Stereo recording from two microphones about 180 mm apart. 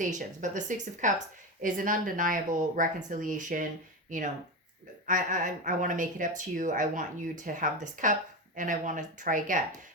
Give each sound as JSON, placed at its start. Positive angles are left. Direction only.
{"t": 0.0, "sound": "speech", "side_deg": -45}